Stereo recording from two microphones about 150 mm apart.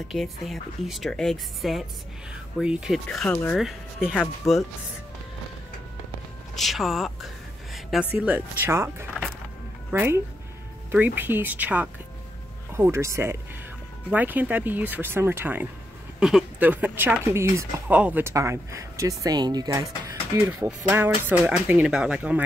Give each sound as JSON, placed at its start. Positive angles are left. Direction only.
{"t": 0.1, "sound": "speech", "side_deg": 0}
{"t": 6.5, "sound": "speech", "side_deg": 0}
{"t": 8.3, "sound": "speech", "side_deg": -15}
{"t": 16.2, "sound": "speech", "side_deg": -5}
{"t": 20.3, "sound": "speech", "side_deg": -10}